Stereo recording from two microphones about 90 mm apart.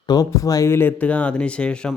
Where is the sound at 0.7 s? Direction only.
20° left (ahead or behind).